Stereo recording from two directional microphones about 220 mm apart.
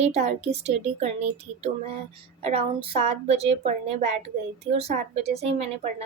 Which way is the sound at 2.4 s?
25° right (ahead or behind).